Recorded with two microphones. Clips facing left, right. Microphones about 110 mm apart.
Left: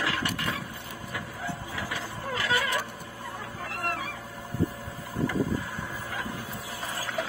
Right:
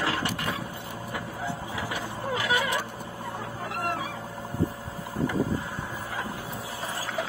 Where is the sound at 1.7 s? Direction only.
20° right (ahead or behind).